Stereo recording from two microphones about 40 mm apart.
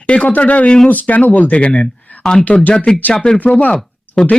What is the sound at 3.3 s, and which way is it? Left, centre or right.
Speech, left.